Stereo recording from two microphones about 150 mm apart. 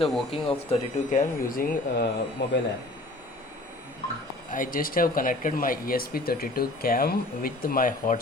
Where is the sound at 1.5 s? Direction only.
70° left (ahead or behind).